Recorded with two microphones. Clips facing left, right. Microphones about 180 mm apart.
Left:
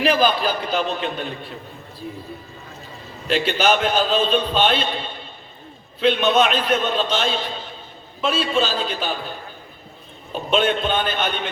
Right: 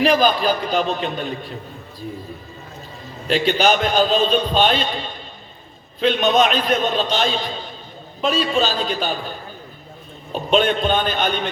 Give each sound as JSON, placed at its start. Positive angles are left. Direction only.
{"t": 0.0, "sound": "a man's voice", "side_deg": -40}
{"t": 3.2, "sound": "a man's voice", "side_deg": -40}
{"t": 10.3, "sound": "a man's voice", "side_deg": -40}